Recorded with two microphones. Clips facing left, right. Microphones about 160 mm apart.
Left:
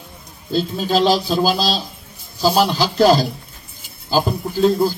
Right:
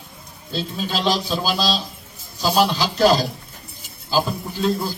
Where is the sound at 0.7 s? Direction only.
40° left (ahead or behind).